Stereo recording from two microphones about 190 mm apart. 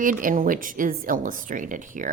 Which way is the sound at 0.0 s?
45° right (ahead or behind).